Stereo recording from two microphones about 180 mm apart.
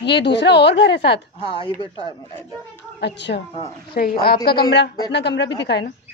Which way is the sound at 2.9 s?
70° left (ahead or behind).